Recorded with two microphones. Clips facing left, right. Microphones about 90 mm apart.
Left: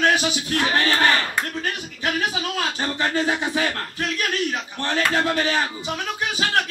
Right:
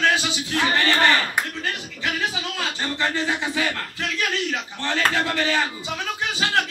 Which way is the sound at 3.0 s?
20° left (ahead or behind).